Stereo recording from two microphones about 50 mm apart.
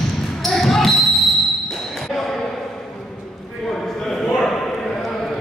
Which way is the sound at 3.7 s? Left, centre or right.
Centre.